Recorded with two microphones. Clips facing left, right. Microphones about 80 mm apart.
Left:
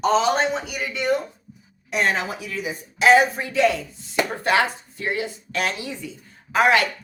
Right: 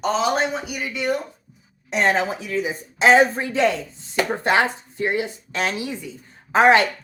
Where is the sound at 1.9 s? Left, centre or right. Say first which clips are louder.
Right 3 dB; right.